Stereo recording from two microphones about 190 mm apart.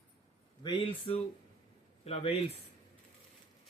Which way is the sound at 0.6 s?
30° left (ahead or behind).